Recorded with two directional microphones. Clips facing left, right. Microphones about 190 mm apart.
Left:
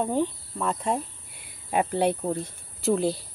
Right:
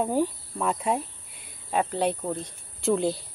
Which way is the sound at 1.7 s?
10° left (ahead or behind).